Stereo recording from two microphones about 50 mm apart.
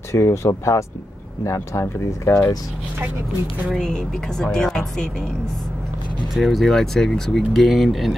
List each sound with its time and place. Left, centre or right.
0.1 s speech: left
1.4 s speech: left
3.7 s speech: centre
6.3 s speech: centre
7.5 s speech: centre